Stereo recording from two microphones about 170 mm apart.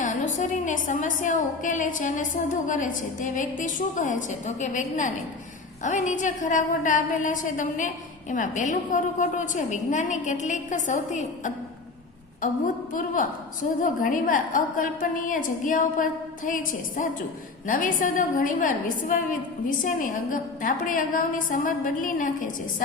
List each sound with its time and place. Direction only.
0.0 s a woman's voice: 45° left (ahead or behind)
12.9 s a woman's voice: 50° left (ahead or behind)